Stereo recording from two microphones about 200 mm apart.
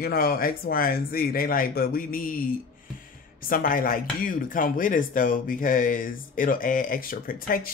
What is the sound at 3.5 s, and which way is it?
Speech, 45° left (ahead or behind).